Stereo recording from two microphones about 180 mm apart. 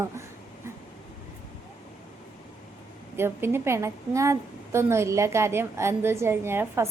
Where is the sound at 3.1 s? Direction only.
15° right (ahead or behind).